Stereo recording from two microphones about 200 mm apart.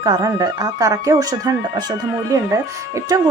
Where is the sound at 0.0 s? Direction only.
15° right (ahead or behind).